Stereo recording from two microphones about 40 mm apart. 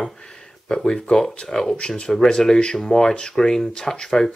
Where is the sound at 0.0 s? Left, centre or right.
Centre.